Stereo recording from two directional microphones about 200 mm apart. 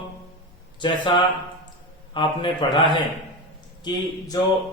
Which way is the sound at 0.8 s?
25° left (ahead or behind).